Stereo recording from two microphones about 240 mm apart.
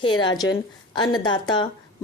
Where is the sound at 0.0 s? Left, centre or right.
Centre.